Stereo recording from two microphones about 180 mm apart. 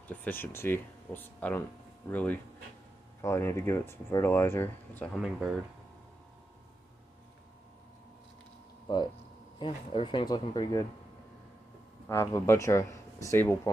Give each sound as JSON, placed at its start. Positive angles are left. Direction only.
{"t": 0.1, "sound": "speech", "side_deg": 10}
{"t": 8.8, "sound": "speech", "side_deg": 25}
{"t": 12.1, "sound": "speech", "side_deg": 15}